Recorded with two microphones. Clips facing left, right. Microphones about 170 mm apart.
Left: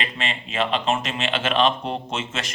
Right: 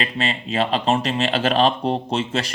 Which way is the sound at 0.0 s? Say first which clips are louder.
Right 5 dB; 35° right (ahead or behind).